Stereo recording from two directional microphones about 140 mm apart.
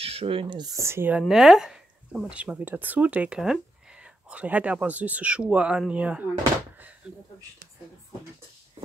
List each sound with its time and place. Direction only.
0.0 s speech: 45° right (ahead or behind); by 1.2 s 15° right (ahead or behind)
1.2 s speech: centre (ahead or behind)